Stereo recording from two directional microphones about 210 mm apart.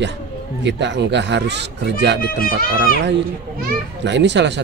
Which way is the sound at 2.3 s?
45° left (ahead or behind).